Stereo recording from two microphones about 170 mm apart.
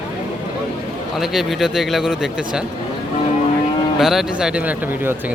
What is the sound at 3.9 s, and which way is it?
Speech, centre (ahead or behind).